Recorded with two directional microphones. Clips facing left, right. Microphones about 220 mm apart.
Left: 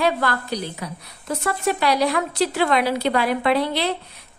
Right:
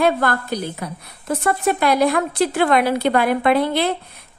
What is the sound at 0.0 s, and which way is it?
A woman's voice, 50° right (ahead or behind).